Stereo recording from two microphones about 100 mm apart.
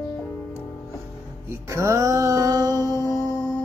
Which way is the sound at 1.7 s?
30° right (ahead or behind).